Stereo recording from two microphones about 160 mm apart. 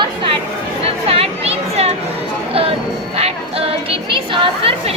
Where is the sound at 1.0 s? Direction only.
40° right (ahead or behind).